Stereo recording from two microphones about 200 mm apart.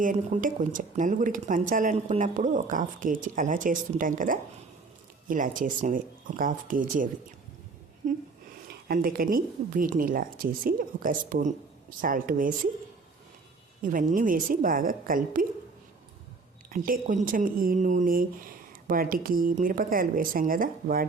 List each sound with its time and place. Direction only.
0.0 s speech: 40° right (ahead or behind)
8.9 s speech: 45° right (ahead or behind)
13.8 s speech: 40° right (ahead or behind)
16.6 s speech: 45° right (ahead or behind)